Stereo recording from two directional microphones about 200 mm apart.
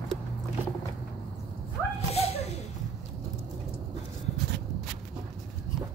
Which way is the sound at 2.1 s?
30° left (ahead or behind).